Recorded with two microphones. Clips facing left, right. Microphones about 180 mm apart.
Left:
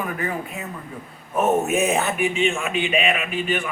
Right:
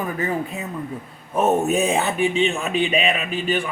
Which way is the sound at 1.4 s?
35° right (ahead or behind).